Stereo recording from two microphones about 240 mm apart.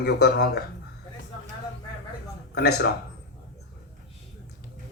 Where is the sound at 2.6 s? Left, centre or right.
Left.